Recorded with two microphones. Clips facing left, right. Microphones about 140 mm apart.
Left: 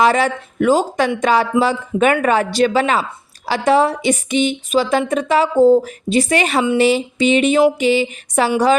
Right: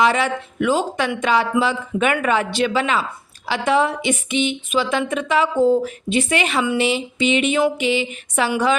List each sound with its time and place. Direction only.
0.0 s speech: 40° left (ahead or behind)